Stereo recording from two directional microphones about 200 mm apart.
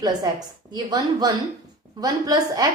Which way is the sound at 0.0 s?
20° right (ahead or behind).